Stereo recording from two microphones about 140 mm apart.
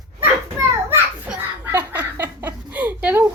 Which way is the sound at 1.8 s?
15° right (ahead or behind).